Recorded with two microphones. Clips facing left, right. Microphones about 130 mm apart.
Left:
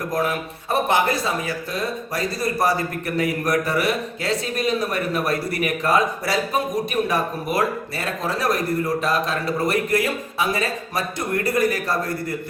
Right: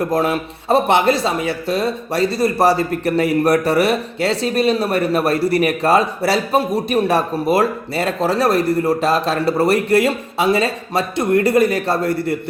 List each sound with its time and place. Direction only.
0.0 s a man's voice: 25° right (ahead or behind)